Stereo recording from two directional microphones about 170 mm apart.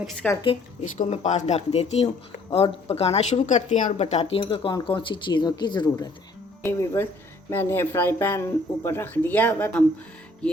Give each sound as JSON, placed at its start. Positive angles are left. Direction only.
{"t": 0.2, "sound": "speech", "side_deg": 10}
{"t": 0.9, "sound": "speech", "side_deg": 40}
{"t": 6.7, "sound": "speech", "side_deg": 15}